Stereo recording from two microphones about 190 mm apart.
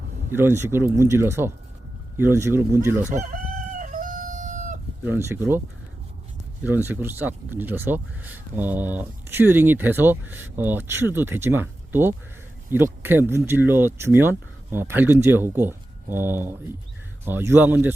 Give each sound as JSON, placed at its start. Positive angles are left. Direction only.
{"t": 0.3, "sound": "speech", "side_deg": -10}
{"t": 3.8, "sound": "chicken", "side_deg": -40}
{"t": 5.0, "sound": "speech", "side_deg": -10}